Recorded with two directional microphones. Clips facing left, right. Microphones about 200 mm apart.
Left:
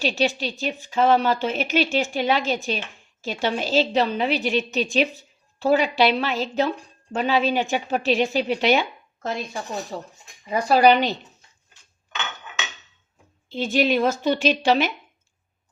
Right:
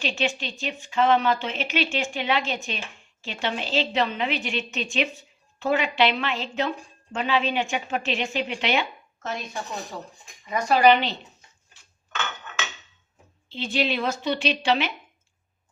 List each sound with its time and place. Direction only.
0.0 s a woman's voice: 40° left (ahead or behind)
10.4 s a woman's voice: 30° left (ahead or behind)
13.5 s a woman's voice: 45° left (ahead or behind)